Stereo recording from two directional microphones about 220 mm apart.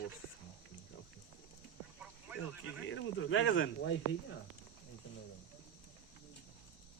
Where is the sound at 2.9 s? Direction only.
60° left (ahead or behind).